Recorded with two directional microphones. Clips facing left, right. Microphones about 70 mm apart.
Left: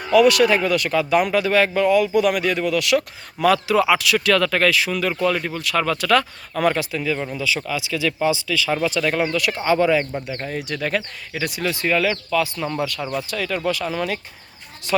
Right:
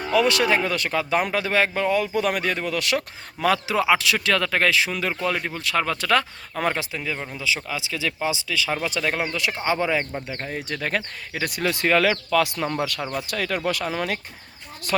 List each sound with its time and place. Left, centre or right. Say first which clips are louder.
0.1 s speech: left 6 dB; right
13.2 s speech: left 1 dB; right